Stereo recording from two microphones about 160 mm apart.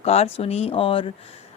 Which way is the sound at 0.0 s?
40° left (ahead or behind).